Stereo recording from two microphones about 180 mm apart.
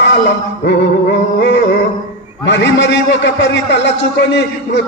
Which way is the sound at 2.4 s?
80° left.